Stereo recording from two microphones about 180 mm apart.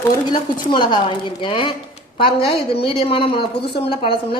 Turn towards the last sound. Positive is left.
turn(degrees=30)  # may be behind; listen again after turning